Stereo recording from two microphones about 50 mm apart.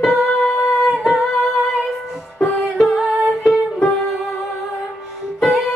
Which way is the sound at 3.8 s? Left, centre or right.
Centre.